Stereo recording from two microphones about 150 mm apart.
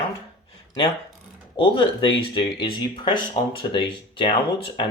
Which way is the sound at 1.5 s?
35° left (ahead or behind).